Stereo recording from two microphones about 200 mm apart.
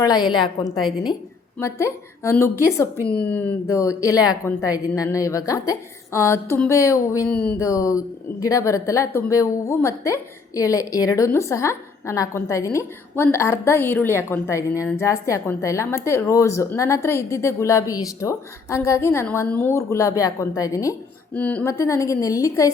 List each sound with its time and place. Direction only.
0.0 s a woman's voice: 20° left (ahead or behind)
7.3 s a sound: 5° left (ahead or behind)
7.7 s speech: 15° left (ahead or behind)